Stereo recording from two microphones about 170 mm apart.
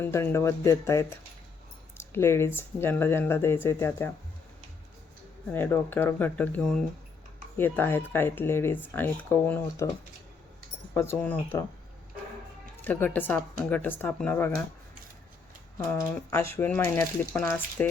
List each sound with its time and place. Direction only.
0.0 s speech: 15° left (ahead or behind)
5.5 s speech: 15° left (ahead or behind)
10.9 s speech: 15° left (ahead or behind)
12.8 s speech: 10° left (ahead or behind)
16.3 s speech: 15° left (ahead or behind)